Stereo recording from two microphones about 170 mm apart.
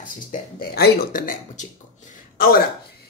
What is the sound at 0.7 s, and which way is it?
Speech, 65° left (ahead or behind).